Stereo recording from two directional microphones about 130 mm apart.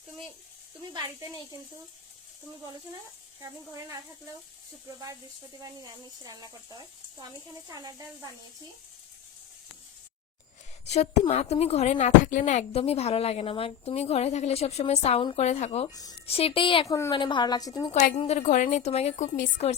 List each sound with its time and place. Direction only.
0.9 s speech: 30° right (ahead or behind)
3.4 s speech: 25° right (ahead or behind)
10.9 s a woman's voice: 60° left (ahead or behind)
15.9 s a woman's voice: 30° left (ahead or behind)
16.2 s speech: 50° left (ahead or behind)
16.8 s a woman's voice: 25° left (ahead or behind)
17.2 s a woman's voice: 35° left (ahead or behind)
18.3 s a woman's voice: 75° left (ahead or behind)